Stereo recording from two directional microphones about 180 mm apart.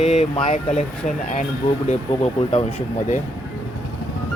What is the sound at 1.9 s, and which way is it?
Speech, 35° left (ahead or behind).